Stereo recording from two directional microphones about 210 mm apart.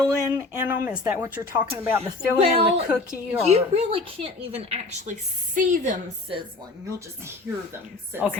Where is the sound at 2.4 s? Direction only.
30° right (ahead or behind).